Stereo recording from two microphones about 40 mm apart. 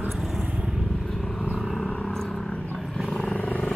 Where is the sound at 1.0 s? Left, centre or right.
Centre.